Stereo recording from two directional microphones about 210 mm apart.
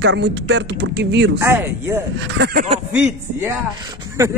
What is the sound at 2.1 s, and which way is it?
Speech, 55° right (ahead or behind).